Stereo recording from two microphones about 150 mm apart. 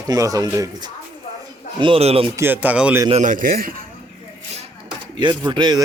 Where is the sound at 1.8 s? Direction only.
40° right (ahead or behind).